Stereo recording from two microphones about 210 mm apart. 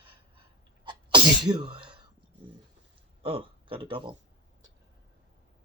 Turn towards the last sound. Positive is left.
turn(degrees=-25)  # may be behind; listen again after turning